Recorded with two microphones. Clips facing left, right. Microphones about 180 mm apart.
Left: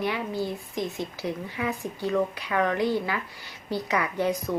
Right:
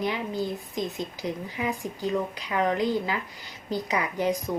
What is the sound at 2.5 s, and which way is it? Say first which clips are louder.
A woman's voice: even; 25° right (ahead or behind).